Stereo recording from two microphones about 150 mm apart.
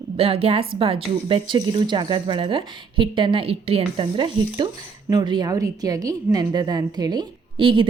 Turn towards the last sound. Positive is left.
turn(degrees=-35)  # may be behind; listen again after turning